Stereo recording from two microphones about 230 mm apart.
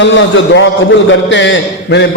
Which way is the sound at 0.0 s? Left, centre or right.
Left.